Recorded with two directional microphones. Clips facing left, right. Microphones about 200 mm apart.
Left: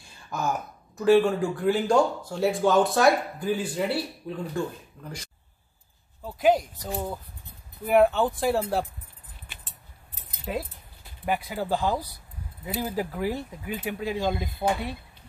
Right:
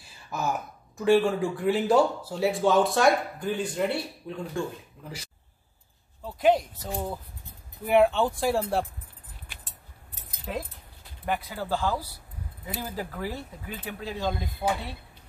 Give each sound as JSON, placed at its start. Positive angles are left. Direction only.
{"t": 0.0, "sound": "speech", "side_deg": 0}
{"t": 6.2, "sound": "speech", "side_deg": 0}
{"t": 10.4, "sound": "speech", "side_deg": 5}
{"t": 14.6, "sound": "speech", "side_deg": 30}